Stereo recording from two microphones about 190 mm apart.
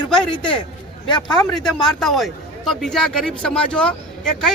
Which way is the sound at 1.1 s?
20° left (ahead or behind).